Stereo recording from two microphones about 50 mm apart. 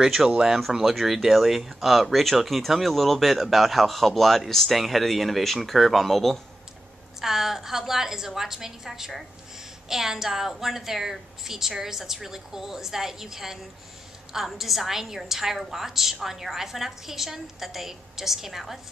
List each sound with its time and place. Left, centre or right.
0.0 s speech: centre
7.2 s a woman's voice: centre